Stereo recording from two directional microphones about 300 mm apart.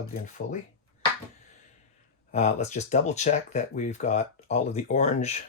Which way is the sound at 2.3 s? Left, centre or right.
Left.